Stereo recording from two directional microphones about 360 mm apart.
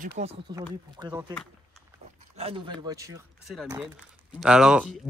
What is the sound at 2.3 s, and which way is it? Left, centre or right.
Speech, centre.